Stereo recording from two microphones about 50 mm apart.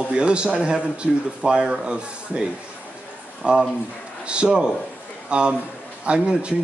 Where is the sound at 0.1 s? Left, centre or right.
Centre.